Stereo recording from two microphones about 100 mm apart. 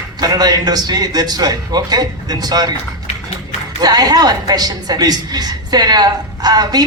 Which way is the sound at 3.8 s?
45° right (ahead or behind).